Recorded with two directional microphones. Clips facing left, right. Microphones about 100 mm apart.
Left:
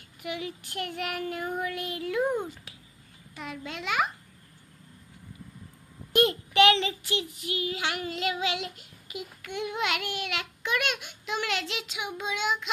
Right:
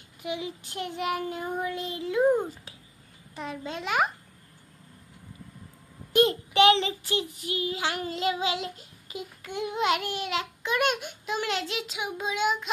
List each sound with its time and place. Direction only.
0.2 s child singing: 20° right (ahead or behind); by 4.1 s 40° right (ahead or behind)
6.1 s child singing: 30° right (ahead or behind)